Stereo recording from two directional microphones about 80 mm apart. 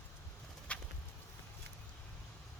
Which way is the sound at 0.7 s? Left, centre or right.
Centre.